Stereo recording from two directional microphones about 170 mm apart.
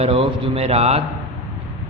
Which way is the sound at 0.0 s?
35° right (ahead or behind).